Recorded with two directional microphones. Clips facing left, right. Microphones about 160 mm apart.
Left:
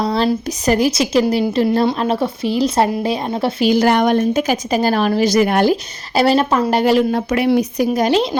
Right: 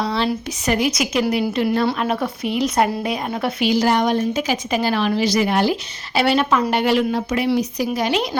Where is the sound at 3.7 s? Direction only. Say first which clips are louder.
Left 4 dB; 55° left (ahead or behind); by 7.0 s 40° left (ahead or behind).